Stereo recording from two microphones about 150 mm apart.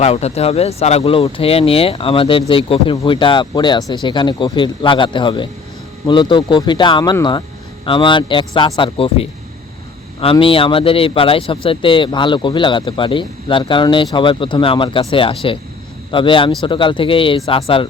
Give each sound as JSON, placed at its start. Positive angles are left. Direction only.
{"t": 0.0, "sound": "speech", "side_deg": 45}